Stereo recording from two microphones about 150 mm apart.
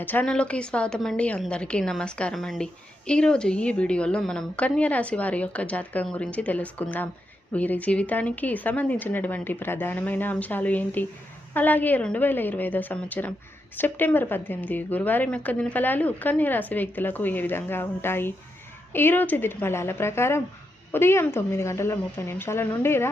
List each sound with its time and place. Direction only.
0.0 s speech: 10° left (ahead or behind)